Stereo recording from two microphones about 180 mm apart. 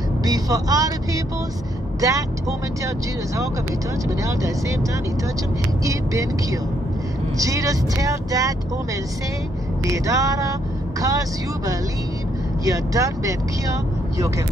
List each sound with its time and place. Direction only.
0.2 s speech: 20° right (ahead or behind)
4.2 s speech: 15° right (ahead or behind)
5.9 s speech: 20° right (ahead or behind)
9.8 s speech: 20° right (ahead or behind)